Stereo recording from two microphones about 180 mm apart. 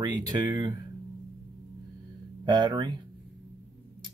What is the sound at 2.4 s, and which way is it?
Speech, 25° right (ahead or behind).